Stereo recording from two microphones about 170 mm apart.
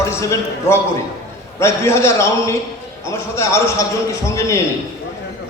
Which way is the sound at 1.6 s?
15° left (ahead or behind).